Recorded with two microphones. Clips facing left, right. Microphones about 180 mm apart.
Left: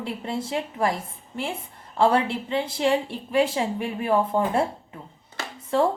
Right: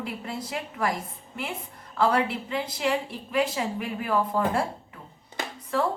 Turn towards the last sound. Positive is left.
turn(degrees=30)  # may be behind; listen again after turning